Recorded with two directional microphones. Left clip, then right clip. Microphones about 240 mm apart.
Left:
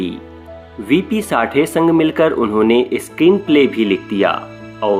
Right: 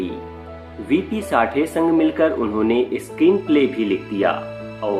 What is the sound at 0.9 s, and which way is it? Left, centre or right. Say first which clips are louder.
Speech: left 4 dB; left.